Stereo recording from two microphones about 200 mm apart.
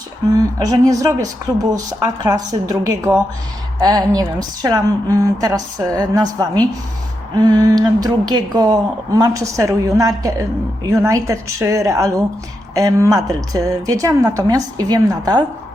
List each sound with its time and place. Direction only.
0.6 s a woman's voice: 15° right (ahead or behind)
6.4 s a sound: 20° right (ahead or behind)
9.1 s a woman's voice: 15° right (ahead or behind)